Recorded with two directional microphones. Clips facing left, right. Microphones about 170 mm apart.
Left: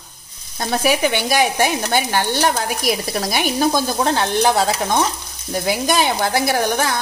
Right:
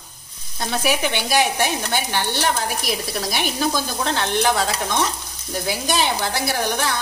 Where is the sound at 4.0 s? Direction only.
40° left (ahead or behind).